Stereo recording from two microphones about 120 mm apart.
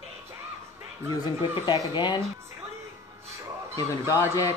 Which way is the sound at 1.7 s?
40° left (ahead or behind).